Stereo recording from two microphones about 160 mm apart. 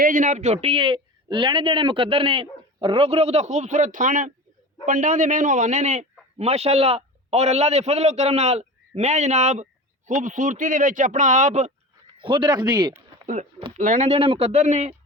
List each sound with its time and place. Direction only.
0.0 s a man's voice: 55° right (ahead or behind)
12.2 s a man's voice: 30° right (ahead or behind)
13.2 s speech: 45° right (ahead or behind)